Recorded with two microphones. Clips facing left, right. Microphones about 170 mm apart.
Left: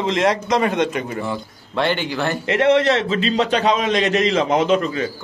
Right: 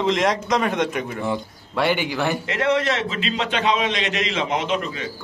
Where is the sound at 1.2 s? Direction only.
15° right (ahead or behind).